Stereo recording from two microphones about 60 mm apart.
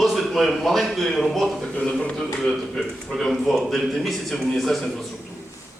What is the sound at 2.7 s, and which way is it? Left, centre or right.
A man's voice, centre.